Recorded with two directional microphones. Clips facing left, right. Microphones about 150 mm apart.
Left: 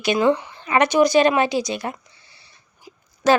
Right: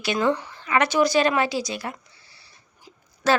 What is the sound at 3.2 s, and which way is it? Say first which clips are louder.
Speech: left 4 dB; 15° left (ahead or behind).